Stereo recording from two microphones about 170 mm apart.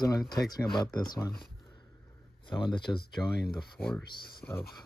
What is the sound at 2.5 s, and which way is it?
Speech, 25° left (ahead or behind).